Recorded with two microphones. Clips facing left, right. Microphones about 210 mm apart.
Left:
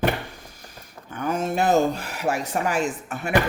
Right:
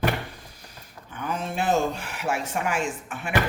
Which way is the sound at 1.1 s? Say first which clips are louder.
Left 5 dB; 45° left (ahead or behind).